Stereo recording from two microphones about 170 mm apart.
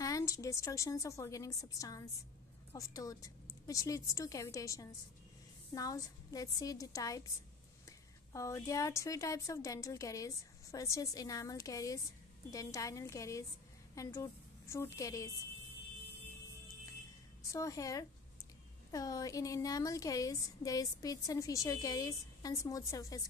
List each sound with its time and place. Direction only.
0.0 s a woman's voice: 20° left (ahead or behind)
8.3 s a woman's voice: 20° left (ahead or behind)
17.4 s a woman's voice: 20° left (ahead or behind)